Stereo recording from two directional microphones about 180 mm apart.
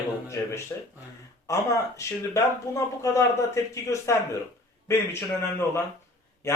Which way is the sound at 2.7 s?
20° left (ahead or behind).